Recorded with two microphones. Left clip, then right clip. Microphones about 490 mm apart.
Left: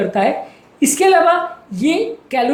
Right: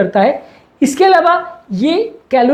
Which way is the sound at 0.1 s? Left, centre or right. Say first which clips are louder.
Right 4 dB; right.